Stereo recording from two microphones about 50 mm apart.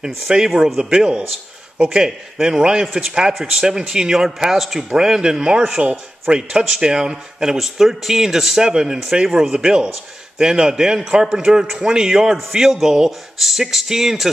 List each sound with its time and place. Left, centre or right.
0.0 s speech: centre